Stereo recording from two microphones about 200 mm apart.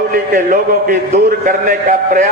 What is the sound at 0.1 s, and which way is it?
A man's voice, 45° right (ahead or behind).